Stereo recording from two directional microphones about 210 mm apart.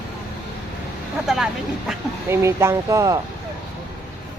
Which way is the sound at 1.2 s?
Centre (ahead or behind).